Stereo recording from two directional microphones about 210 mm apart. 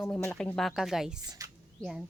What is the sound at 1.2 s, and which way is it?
Speech, 20° right (ahead or behind).